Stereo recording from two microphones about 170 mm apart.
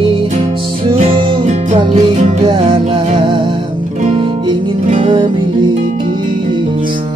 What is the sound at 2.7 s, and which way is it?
Music, 30° right (ahead or behind).